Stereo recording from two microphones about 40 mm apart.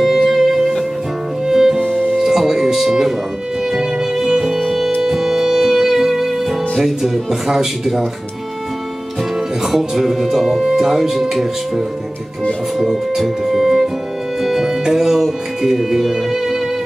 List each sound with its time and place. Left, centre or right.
0.0 s music: centre
1.8 s music: right
2.2 s music: centre
6.8 s speech: centre
9.7 s speech: centre
14.4 s music: centre